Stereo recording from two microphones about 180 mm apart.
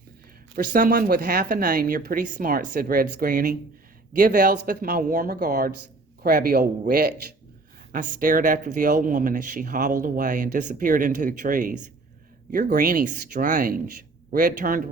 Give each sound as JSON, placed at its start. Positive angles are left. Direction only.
{"t": 0.5, "sound": "speech", "side_deg": -50}
{"t": 12.6, "sound": "speech", "side_deg": -50}